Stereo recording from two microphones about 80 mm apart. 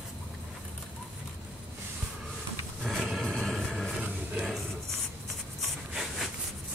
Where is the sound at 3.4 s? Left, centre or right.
Centre.